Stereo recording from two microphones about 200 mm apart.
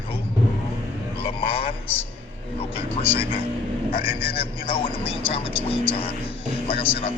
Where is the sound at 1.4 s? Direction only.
25° left (ahead or behind).